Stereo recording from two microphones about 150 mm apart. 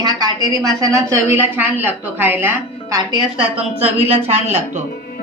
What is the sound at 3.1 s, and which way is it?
A woman's voice, 40° right (ahead or behind).